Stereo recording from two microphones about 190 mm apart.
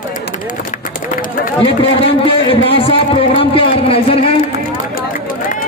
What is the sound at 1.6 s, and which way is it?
Speech, 30° left (ahead or behind).